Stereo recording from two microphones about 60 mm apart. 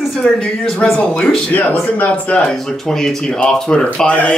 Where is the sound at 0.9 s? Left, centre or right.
Centre.